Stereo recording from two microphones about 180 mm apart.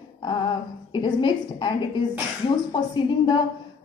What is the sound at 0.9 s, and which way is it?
A woman's voice, 25° left (ahead or behind).